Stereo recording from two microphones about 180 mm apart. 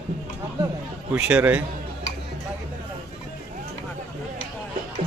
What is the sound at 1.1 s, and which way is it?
Speech, 10° right (ahead or behind).